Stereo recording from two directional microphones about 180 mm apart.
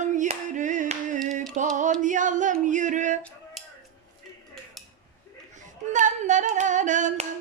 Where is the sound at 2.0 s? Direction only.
45° right (ahead or behind).